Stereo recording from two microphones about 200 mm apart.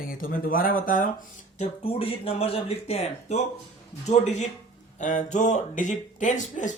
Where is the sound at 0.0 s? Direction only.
45° left (ahead or behind).